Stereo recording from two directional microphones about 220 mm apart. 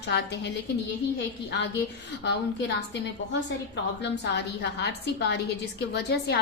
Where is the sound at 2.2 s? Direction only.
50° left (ahead or behind).